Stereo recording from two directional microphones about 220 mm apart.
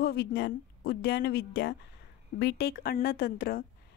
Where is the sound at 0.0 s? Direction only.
45° left (ahead or behind).